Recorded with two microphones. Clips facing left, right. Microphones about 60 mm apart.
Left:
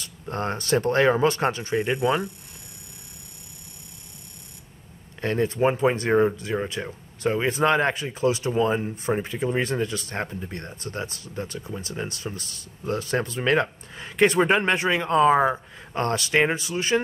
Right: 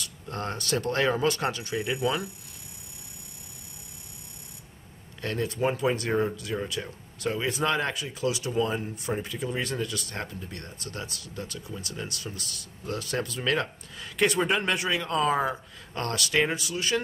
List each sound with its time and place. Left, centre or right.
0.0 s speech: left
5.2 s speech: left